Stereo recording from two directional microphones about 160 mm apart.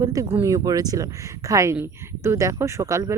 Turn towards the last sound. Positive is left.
turn(degrees=-20)  # may be behind; listen again after turning